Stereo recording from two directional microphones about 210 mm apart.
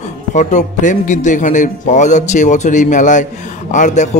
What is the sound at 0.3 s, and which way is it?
A man's voice, 35° left (ahead or behind).